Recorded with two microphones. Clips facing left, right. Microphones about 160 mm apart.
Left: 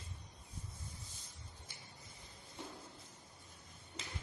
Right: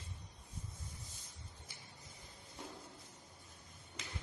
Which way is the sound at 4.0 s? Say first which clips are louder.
Left 1 dB; 30° left (ahead or behind).